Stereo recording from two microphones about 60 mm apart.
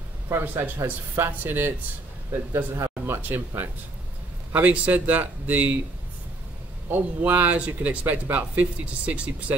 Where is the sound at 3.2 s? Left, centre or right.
Right.